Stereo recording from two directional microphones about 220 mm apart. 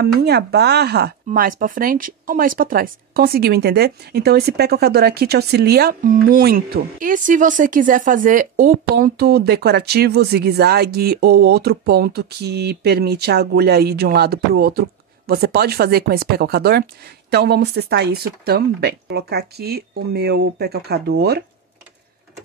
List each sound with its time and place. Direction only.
0.0 s speech: 45° right (ahead or behind)